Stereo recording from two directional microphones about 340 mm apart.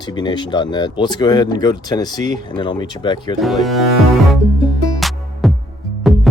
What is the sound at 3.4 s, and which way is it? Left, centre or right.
Speech, centre.